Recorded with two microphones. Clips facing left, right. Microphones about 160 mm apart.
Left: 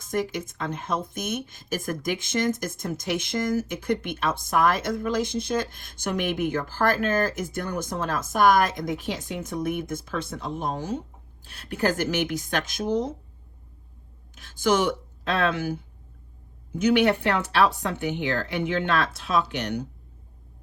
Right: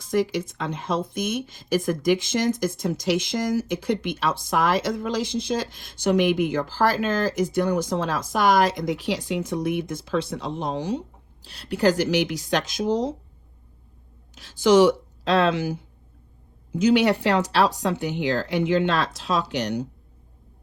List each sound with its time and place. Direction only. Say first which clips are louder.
0.0 s speech: right 4 dB; 50° left (ahead or behind)
14.3 s speech: right 6 dB; 55° left (ahead or behind)